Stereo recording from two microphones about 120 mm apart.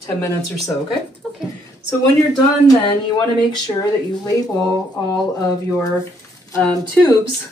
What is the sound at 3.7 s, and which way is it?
Speech, 30° left (ahead or behind).